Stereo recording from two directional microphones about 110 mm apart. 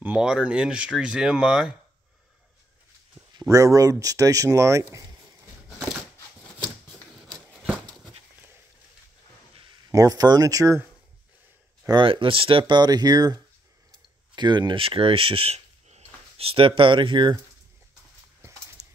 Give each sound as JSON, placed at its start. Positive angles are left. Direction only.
{"t": 0.0, "sound": "speech", "side_deg": -10}
{"t": 3.3, "sound": "speech", "side_deg": -30}
{"t": 7.2, "sound": "a sound", "side_deg": 0}
{"t": 9.8, "sound": "speech", "side_deg": -30}
{"t": 12.0, "sound": "speech", "side_deg": -55}
{"t": 18.4, "sound": "dog", "side_deg": -25}